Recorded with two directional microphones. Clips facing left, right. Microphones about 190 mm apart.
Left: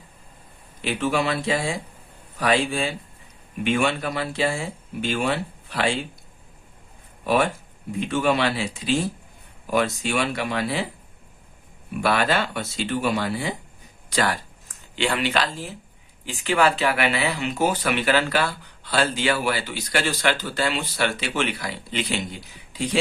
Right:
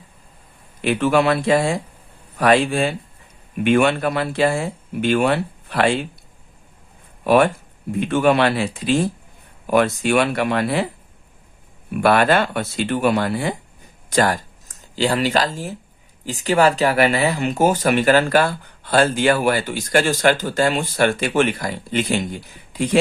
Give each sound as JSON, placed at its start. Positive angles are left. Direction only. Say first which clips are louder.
{"t": 0.8, "sound": "speech", "louder": "right 6 dB", "side_deg": -60}
{"t": 7.9, "sound": "speech", "louder": "right 5 dB", "side_deg": -60}
{"t": 9.6, "sound": "speech", "louder": "right 6 dB", "side_deg": -60}
{"t": 11.9, "sound": "speech", "louder": "right 6 dB", "side_deg": -55}